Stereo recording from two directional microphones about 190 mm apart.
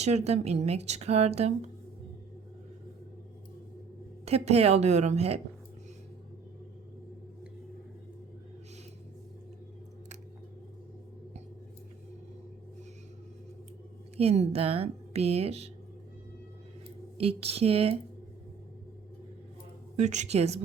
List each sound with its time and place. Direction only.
0.0 s a woman's voice: 35° right (ahead or behind)
4.3 s a woman's voice: 35° right (ahead or behind)
14.2 s a woman's voice: 30° right (ahead or behind)
17.2 s a woman's voice: 30° right (ahead or behind)
20.0 s a woman's voice: 40° right (ahead or behind)